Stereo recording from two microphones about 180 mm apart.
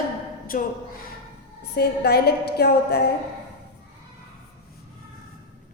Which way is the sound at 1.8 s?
60° left (ahead or behind).